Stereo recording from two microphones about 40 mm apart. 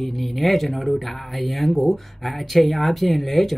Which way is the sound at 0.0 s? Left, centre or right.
Centre.